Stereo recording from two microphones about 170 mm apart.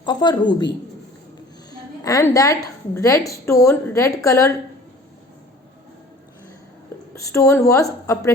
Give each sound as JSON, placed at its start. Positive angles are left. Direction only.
{"t": 0.0, "sound": "a woman's voice", "side_deg": 25}
{"t": 2.0, "sound": "a woman's voice", "side_deg": 20}
{"t": 7.2, "sound": "a woman's voice", "side_deg": 20}